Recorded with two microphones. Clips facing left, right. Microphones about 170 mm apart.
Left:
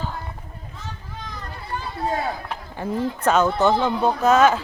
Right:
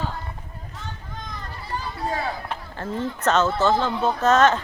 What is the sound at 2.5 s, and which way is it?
Speech, 10° left (ahead or behind).